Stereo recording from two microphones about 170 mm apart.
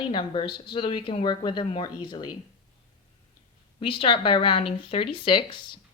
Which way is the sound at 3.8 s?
30° left (ahead or behind).